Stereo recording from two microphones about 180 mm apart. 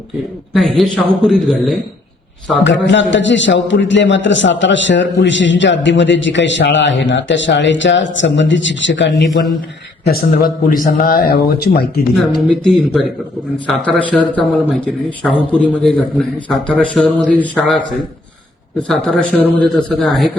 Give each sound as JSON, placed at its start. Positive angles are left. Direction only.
{"t": 0.5, "sound": "a man's voice", "side_deg": 0}
{"t": 2.6, "sound": "a man's voice", "side_deg": 85}
{"t": 10.0, "sound": "a man's voice", "side_deg": 55}
{"t": 12.1, "sound": "a man's voice", "side_deg": 0}
{"t": 18.9, "sound": "a man's voice", "side_deg": 5}